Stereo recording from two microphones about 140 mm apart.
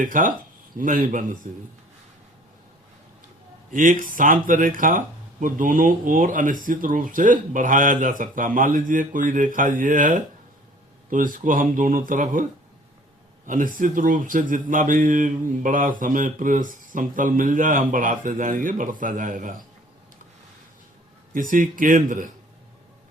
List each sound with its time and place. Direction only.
0.0 s speech: 75° right (ahead or behind)
1.5 s speech: 65° right (ahead or behind)
3.7 s speech: 70° right (ahead or behind)
13.5 s speech: 70° right (ahead or behind)
21.3 s speech: 75° right (ahead or behind)